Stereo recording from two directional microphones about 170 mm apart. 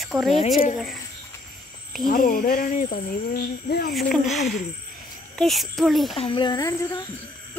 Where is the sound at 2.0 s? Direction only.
55° left (ahead or behind).